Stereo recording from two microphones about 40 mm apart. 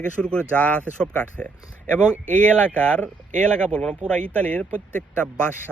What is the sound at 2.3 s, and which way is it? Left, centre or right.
Speech, left.